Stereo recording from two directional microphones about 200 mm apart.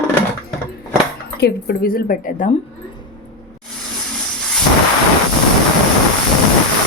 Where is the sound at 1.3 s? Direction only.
55° left (ahead or behind).